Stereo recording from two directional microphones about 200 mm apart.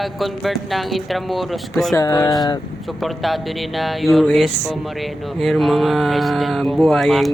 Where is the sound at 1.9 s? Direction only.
20° left (ahead or behind).